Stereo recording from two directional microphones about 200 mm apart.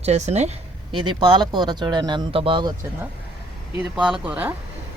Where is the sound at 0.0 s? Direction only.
35° right (ahead or behind).